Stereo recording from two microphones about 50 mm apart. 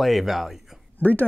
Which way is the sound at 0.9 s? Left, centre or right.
Left.